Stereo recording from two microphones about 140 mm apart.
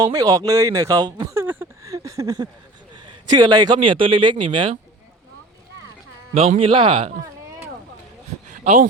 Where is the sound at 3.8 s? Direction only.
40° right (ahead or behind).